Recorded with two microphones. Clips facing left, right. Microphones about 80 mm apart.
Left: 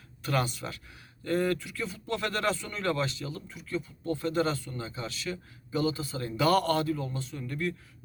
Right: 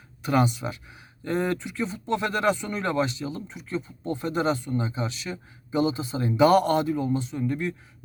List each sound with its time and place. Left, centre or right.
0.2 s speech: centre